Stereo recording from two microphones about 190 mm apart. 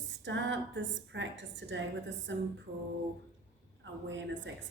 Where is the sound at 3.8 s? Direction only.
75° right (ahead or behind).